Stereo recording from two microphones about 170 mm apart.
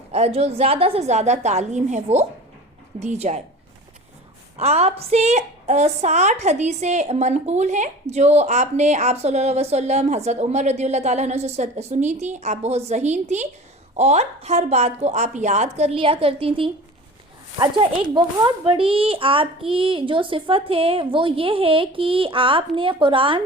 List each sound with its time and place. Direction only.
0.1 s a woman's voice: 35° right (ahead or behind)
4.5 s a woman's voice: 40° right (ahead or behind)